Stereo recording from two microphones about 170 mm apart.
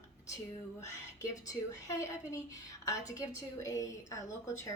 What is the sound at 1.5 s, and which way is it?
A woman's voice, 20° left (ahead or behind).